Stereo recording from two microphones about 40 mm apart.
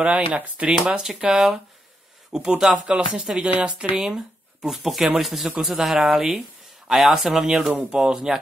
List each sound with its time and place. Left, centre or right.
0.0 s speech: right
0.7 s speech: centre
2.9 s speech: right
4.6 s speech: centre